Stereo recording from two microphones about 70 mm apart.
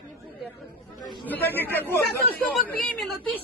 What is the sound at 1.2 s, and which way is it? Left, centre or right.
Speech, left.